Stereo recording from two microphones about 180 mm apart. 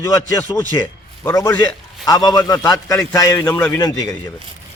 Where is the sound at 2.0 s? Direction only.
20° left (ahead or behind).